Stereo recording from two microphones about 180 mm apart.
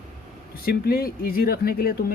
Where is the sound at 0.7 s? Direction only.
55° left (ahead or behind).